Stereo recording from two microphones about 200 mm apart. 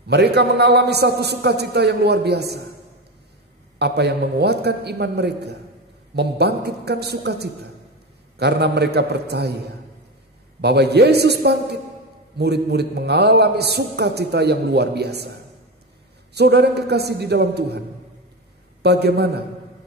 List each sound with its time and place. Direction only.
0.1 s a man's voice: 55° right (ahead or behind)
3.7 s a man's voice: 55° right (ahead or behind)
10.6 s a man's voice: 55° right (ahead or behind)
16.3 s a man's voice: 55° right (ahead or behind)